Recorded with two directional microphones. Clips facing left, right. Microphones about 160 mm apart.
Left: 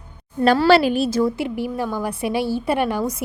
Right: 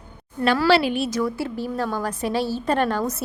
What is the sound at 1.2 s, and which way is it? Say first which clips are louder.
A woman's voice: left 4 dB; 20° left (ahead or behind).